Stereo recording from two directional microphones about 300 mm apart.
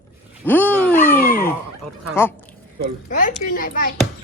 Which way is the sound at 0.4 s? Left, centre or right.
Centre.